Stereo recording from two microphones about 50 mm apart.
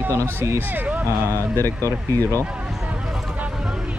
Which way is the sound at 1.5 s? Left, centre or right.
Left.